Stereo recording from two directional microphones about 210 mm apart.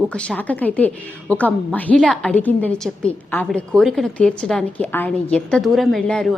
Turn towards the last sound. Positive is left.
turn(degrees=5)  # may be behind; listen again after turning